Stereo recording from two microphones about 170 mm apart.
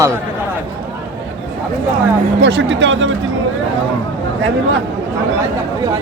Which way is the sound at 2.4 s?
90° right.